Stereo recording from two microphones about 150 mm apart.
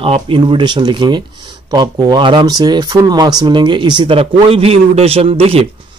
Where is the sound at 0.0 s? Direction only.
35° right (ahead or behind).